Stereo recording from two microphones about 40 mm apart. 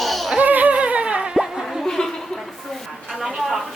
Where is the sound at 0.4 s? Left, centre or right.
Right; by 1.8 s centre.